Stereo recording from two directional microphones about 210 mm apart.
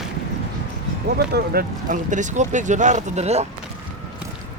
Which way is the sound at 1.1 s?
45° right (ahead or behind).